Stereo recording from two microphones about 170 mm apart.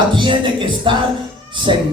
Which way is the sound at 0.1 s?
30° right (ahead or behind).